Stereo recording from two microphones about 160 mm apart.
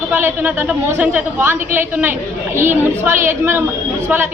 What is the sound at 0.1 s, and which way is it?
A woman's voice, 15° right (ahead or behind).